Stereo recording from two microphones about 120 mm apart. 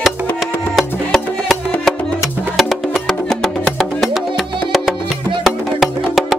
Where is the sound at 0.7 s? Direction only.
5° left (ahead or behind).